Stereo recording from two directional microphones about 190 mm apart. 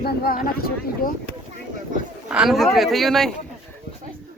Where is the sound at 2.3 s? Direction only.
5° right (ahead or behind).